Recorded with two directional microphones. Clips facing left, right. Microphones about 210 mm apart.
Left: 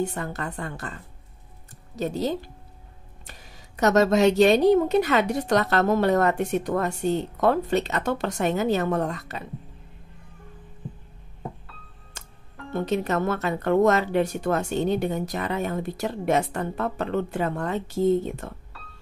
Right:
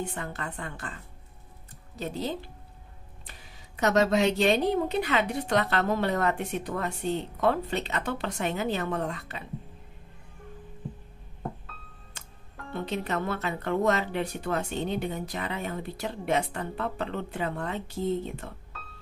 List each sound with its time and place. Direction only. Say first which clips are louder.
0.0 s a woman's voice: left 6 dB; 40° left (ahead or behind)
2.0 s speech: left 6 dB; 45° left (ahead or behind)
12.2 s music: left 4 dB; 45° left (ahead or behind)
12.7 s speech: left 6 dB; 45° left (ahead or behind)